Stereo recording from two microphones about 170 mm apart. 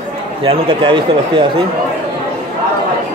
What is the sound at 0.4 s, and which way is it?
Speech, 30° right (ahead or behind).